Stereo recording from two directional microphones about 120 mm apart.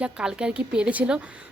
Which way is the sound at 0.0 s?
5° right (ahead or behind).